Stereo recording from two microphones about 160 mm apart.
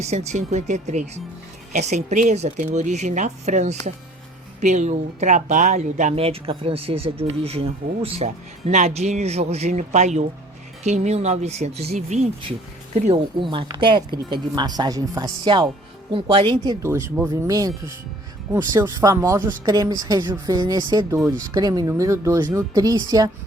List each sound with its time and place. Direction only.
0.0 s speech: 45° right (ahead or behind)
13.4 s speech: 30° right (ahead or behind)
16.8 s speech: 15° right (ahead or behind)